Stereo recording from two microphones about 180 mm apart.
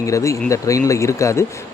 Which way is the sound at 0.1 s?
15° left (ahead or behind).